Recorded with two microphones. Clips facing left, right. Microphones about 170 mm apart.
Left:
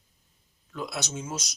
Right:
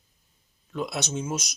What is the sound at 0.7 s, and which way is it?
Speech, 20° right (ahead or behind).